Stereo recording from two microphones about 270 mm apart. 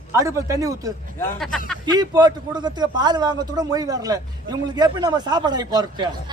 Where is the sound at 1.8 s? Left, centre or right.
Centre.